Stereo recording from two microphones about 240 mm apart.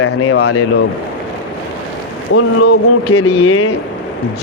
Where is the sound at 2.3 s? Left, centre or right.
Left.